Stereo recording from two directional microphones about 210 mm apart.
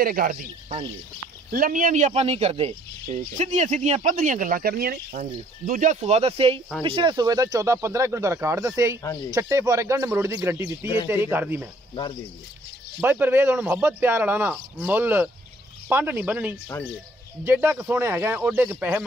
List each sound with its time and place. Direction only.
0.0 s speech: 45° right (ahead or behind)
1.5 s speech: 40° right (ahead or behind); by 11.7 s 10° right (ahead or behind)
11.9 s cricket: 20° left (ahead or behind)
13.0 s speech: 10° right (ahead or behind)